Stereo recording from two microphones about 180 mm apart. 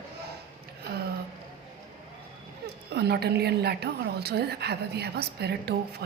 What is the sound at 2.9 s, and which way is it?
A woman's voice, 65° right (ahead or behind).